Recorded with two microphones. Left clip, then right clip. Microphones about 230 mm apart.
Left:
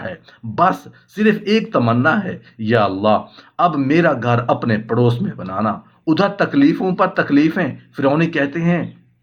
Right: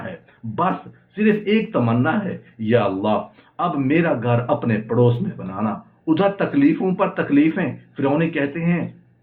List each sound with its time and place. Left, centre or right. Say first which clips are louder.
1.1 s speech: left 3 dB; left